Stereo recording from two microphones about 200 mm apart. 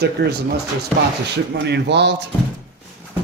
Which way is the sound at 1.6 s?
55° right (ahead or behind).